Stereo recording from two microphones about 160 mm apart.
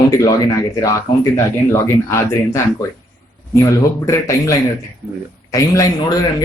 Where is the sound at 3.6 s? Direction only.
20° left (ahead or behind).